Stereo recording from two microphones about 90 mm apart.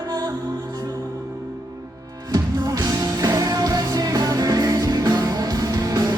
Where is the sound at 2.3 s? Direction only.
45° right (ahead or behind).